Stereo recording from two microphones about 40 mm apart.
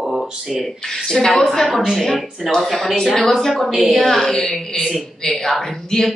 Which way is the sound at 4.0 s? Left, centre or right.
Centre.